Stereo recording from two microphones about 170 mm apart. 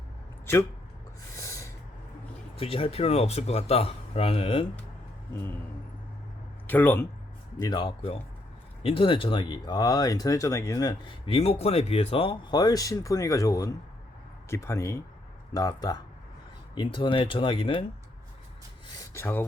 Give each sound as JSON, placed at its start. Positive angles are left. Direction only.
{"t": 1.4, "sound": "snort", "side_deg": 15}
{"t": 2.6, "sound": "speech", "side_deg": 35}
{"t": 5.3, "sound": "speech", "side_deg": 15}
{"t": 6.7, "sound": "speech", "side_deg": 10}
{"t": 7.6, "sound": "speech", "side_deg": 25}
{"t": 18.9, "sound": "speech", "side_deg": 20}